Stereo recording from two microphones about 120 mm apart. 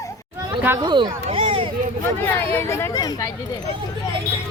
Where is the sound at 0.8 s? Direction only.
40° right (ahead or behind).